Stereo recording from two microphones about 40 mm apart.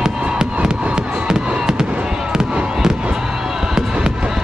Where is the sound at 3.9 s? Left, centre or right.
Right.